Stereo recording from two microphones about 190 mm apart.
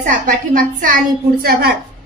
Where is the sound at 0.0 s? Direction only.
45° right (ahead or behind).